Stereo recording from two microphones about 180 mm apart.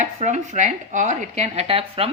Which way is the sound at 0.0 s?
40° right (ahead or behind).